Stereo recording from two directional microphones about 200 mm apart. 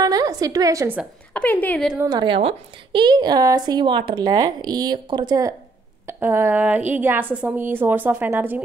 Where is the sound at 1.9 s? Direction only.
15° right (ahead or behind).